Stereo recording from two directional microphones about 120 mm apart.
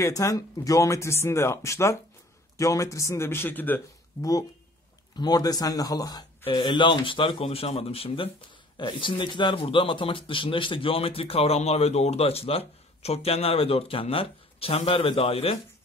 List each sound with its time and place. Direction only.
0.0 s speech: 25° left (ahead or behind)
4.2 s speech: 30° left (ahead or behind)
6.4 s a man's voice: 45° left (ahead or behind)
8.7 s a man's voice: 40° left (ahead or behind); by 15.6 s 55° left (ahead or behind)